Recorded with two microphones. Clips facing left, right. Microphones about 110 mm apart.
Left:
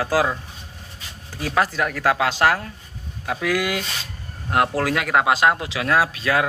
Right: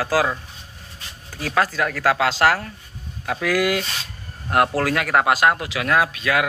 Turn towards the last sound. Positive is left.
turn(degrees=30)  # may be behind; listen again after turning